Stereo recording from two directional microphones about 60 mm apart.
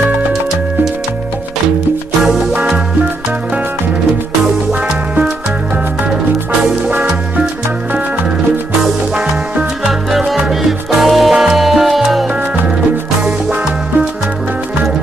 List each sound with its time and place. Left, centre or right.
9.8 s music: centre
13.2 s music: right